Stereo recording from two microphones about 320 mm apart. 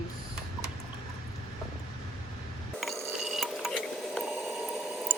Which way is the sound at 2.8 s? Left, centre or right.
Centre.